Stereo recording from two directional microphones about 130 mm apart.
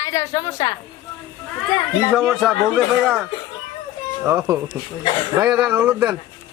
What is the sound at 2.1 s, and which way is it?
Speech, centre (ahead or behind).